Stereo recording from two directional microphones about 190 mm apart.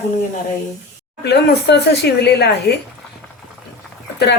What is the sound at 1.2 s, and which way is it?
Speech, 60° left (ahead or behind).